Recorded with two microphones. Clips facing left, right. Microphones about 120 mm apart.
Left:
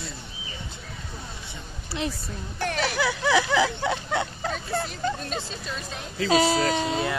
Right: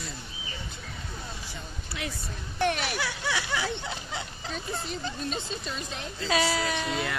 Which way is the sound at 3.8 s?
65° left (ahead or behind).